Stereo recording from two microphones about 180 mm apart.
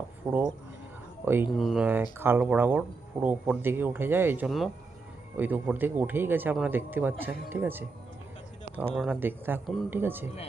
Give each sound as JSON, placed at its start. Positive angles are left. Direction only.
{"t": 0.2, "sound": "speech", "side_deg": 0}
{"t": 9.0, "sound": "speech", "side_deg": -10}